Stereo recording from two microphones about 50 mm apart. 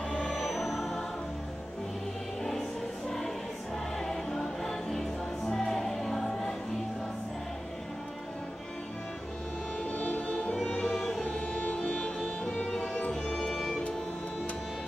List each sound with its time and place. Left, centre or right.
0.1 s music: centre
4.0 s music: centre
9.8 s music: left
10.8 s music: centre
11.2 s music: left; by 13.8 s centre